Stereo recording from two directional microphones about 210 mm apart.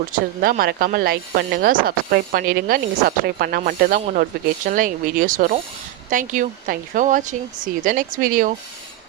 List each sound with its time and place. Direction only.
0.1 s speech: 45° right (ahead or behind)